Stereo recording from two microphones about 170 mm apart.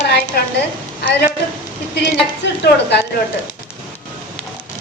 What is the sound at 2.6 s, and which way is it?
Speech, 80° left.